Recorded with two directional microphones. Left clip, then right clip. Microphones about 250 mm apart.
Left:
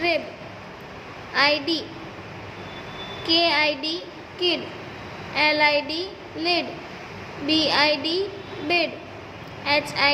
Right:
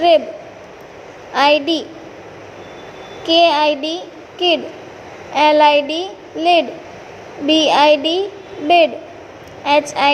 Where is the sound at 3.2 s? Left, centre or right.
Centre.